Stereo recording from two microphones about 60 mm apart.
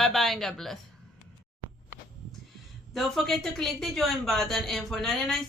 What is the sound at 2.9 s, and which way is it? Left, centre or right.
Speech, centre.